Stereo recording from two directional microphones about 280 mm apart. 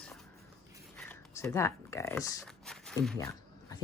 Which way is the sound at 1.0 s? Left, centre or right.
Centre.